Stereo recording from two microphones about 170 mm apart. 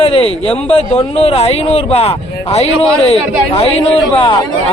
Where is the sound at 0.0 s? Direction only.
35° left (ahead or behind).